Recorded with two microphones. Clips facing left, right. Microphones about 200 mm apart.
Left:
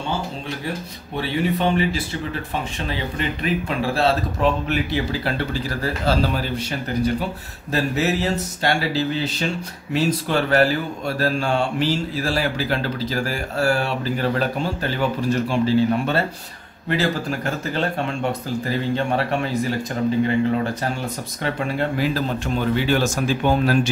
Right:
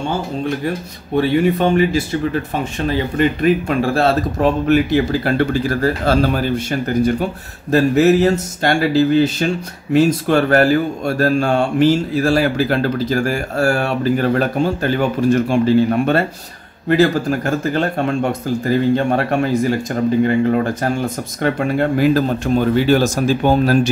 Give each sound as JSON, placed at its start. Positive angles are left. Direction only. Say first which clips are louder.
{"t": 1.1, "sound": "speech", "louder": "right 8 dB", "side_deg": -50}
{"t": 7.7, "sound": "speech", "louder": "right 9 dB", "side_deg": -50}